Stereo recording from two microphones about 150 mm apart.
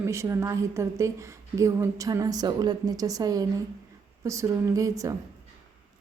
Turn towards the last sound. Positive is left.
turn(degrees=-20)  # may be behind; listen again after turning